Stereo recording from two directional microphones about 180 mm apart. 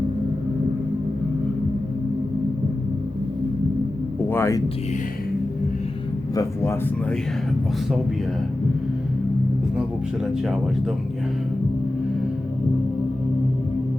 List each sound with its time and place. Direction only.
4.3 s speech: 15° left (ahead or behind)
6.3 s speech: 15° left (ahead or behind)